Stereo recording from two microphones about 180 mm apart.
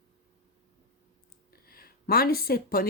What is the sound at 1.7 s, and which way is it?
Speech, 55° left (ahead or behind).